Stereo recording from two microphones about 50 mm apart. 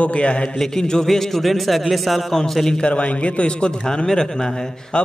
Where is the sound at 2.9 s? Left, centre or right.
Left.